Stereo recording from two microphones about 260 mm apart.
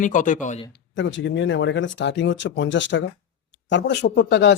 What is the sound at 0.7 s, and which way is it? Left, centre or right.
Speech, left.